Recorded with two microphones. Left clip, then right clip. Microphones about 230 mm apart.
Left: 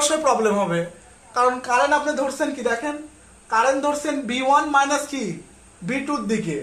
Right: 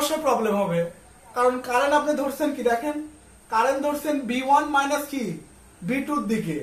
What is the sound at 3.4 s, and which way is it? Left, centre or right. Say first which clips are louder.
Speech: left 3 dB; left.